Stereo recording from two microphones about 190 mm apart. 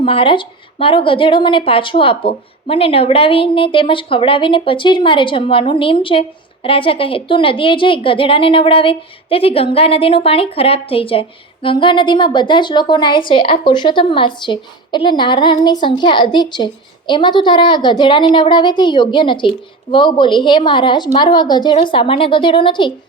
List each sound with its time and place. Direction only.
0.0 s a woman's voice: 30° left (ahead or behind)